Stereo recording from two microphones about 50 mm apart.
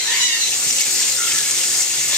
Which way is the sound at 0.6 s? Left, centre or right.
Centre.